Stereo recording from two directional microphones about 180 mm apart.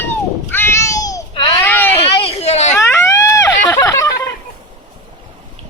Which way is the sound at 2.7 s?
15° left (ahead or behind).